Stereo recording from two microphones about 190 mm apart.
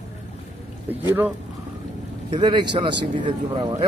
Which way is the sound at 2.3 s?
25° right (ahead or behind).